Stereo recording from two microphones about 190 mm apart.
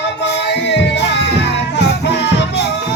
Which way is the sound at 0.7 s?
65° left (ahead or behind).